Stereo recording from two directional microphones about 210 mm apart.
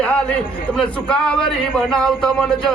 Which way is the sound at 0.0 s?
5° left (ahead or behind).